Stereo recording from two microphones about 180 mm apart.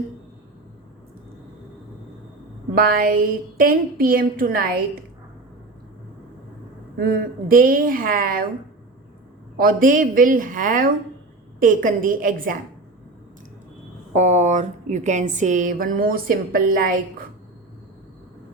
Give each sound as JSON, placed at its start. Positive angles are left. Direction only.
{"t": 2.7, "sound": "a woman's voice", "side_deg": -55}
{"t": 6.9, "sound": "a woman's voice", "side_deg": -55}
{"t": 9.6, "sound": "a woman's voice", "side_deg": -50}
{"t": 14.1, "sound": "a woman's voice", "side_deg": -40}